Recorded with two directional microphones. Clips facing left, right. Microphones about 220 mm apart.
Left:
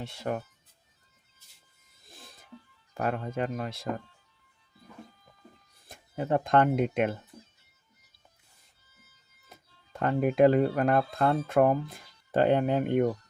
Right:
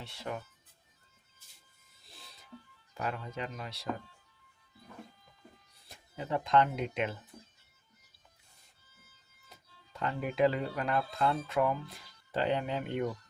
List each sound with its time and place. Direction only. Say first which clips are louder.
0.0 s speech: left 7 dB; 50° left (ahead or behind)
2.0 s music: left 4 dB; 50° left (ahead or behind)
3.0 s speech: left 7 dB; 50° left (ahead or behind)
5.9 s speech: left 7 dB; 50° left (ahead or behind)
9.9 s speech: left 9 dB; 50° left (ahead or behind)